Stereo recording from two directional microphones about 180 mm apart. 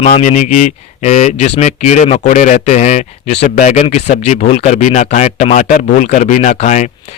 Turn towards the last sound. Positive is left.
turn(degrees=40)  # may be behind; listen again after turning